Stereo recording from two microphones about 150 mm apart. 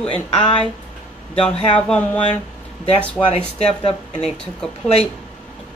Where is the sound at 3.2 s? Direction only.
Centre (ahead or behind).